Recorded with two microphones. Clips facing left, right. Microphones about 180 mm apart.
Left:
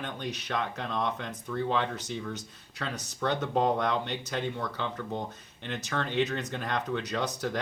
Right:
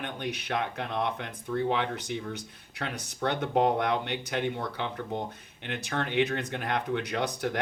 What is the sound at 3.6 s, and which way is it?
Speech, 60° right (ahead or behind).